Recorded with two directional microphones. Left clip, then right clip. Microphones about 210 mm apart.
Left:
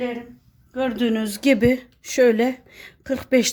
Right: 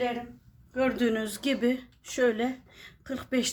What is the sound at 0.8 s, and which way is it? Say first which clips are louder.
Speech: left 4 dB; 25° left (ahead or behind).